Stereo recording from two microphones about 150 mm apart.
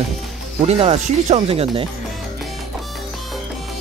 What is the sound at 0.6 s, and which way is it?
Speech, 45° right (ahead or behind).